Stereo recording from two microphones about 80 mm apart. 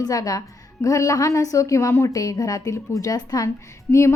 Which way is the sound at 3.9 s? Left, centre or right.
Centre.